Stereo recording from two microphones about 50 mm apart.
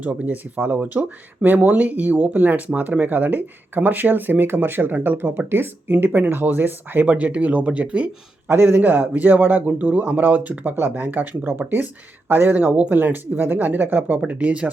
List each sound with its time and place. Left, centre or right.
0.0 s speech: right
5.5 s speech: right
8.4 s speech: right
10.8 s speech: right
12.5 s speech: right
14.3 s speech: right